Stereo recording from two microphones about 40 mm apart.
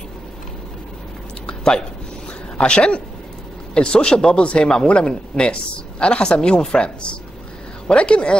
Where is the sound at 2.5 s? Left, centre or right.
Left.